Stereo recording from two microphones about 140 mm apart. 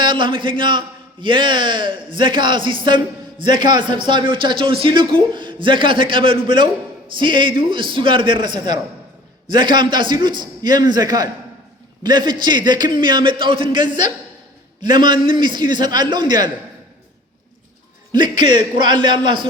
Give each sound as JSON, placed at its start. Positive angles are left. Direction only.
{"t": 0.0, "sound": "a man's voice", "side_deg": -35}
{"t": 18.1, "sound": "a man's voice", "side_deg": -35}